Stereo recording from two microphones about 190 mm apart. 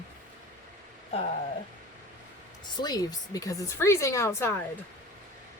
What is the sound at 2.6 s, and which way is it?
Speech, 20° left (ahead or behind).